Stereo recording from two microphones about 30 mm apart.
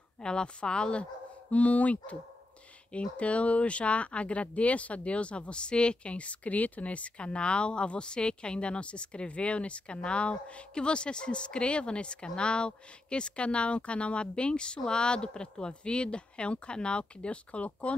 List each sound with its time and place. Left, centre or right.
0.2 s speech: left
1.5 s speech: left
2.9 s speech: left
7.3 s speech: left